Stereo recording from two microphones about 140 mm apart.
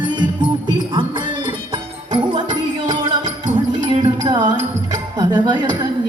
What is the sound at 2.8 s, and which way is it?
Music, 35° right (ahead or behind).